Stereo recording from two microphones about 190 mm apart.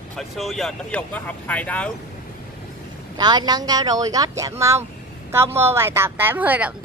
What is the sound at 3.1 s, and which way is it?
A woman's voice, 20° right (ahead or behind).